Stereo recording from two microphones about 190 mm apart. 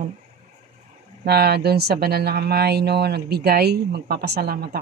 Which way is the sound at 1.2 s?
60° right (ahead or behind).